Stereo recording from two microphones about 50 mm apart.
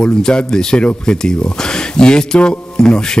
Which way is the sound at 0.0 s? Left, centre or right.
Centre.